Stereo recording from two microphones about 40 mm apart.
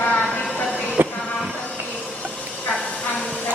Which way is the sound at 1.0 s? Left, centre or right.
Right.